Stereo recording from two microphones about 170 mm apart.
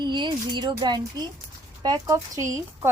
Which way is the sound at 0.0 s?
25° right (ahead or behind).